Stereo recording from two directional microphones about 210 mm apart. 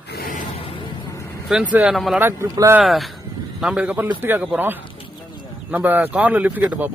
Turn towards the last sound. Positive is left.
turn(degrees=-10)  # may be behind; listen again after turning